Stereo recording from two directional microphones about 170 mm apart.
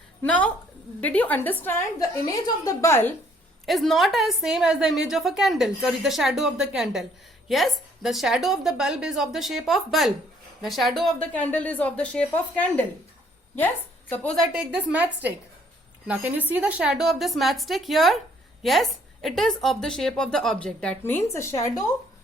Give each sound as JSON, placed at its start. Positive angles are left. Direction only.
{"t": 0.2, "sound": "a woman's voice", "side_deg": 10}
{"t": 3.7, "sound": "a woman's voice", "side_deg": 0}
{"t": 14.5, "sound": "a woman's voice", "side_deg": -10}